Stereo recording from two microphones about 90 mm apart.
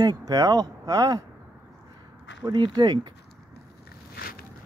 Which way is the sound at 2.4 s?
55° right (ahead or behind).